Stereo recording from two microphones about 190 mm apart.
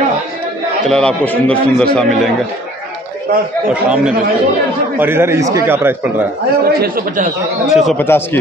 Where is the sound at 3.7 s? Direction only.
5° right (ahead or behind).